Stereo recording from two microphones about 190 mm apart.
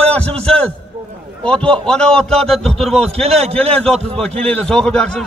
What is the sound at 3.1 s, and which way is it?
Speech, 35° right (ahead or behind).